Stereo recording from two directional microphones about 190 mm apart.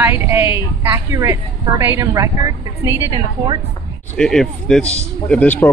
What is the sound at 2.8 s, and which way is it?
Speech, 15° left (ahead or behind).